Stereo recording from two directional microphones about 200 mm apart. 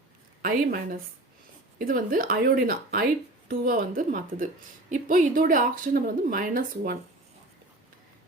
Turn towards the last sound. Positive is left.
turn(degrees=-45)  # may be behind; listen again after turning